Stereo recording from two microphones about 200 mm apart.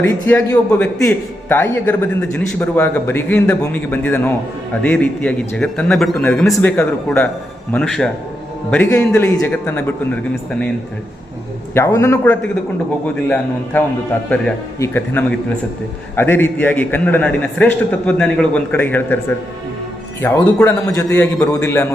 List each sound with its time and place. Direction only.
0.0 s a man's voice: 10° left (ahead or behind)
11.7 s a man's voice: 15° left (ahead or behind)
20.2 s a man's voice: 15° left (ahead or behind)